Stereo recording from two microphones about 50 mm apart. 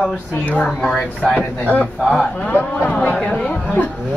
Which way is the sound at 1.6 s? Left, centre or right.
Left.